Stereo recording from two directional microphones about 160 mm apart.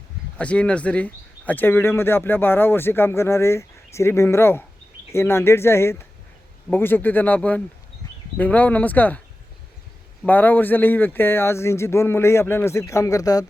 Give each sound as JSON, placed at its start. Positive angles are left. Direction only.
{"t": 0.3, "sound": "speech", "side_deg": 5}
{"t": 10.2, "sound": "speech", "side_deg": 10}